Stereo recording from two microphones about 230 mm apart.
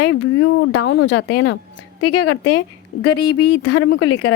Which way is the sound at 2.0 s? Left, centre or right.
Left.